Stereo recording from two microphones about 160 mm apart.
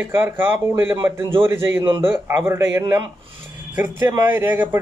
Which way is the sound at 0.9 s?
30° right (ahead or behind).